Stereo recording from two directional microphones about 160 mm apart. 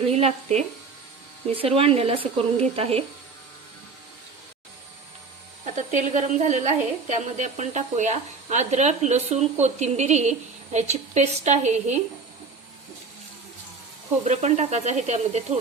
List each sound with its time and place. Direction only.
0.1 s speech: 40° right (ahead or behind)
5.7 s a woman's voice: 50° right (ahead or behind)
14.3 s a woman's voice: 45° right (ahead or behind)